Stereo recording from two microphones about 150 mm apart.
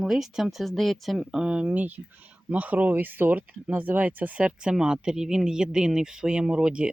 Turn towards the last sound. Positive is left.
turn(degrees=-5)  # may be behind; listen again after turning